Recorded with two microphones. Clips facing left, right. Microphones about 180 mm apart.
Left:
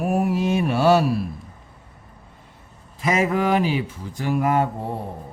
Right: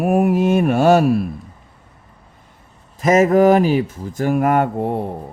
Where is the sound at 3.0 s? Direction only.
45° right (ahead or behind).